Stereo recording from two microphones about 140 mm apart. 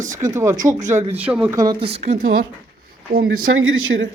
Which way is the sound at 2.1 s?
70° right (ahead or behind).